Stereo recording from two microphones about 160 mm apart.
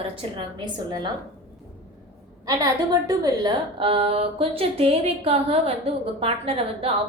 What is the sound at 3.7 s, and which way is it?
Speech, 35° right (ahead or behind).